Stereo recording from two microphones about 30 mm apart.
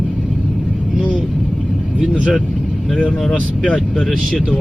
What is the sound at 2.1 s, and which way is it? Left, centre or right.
Vehicle, right.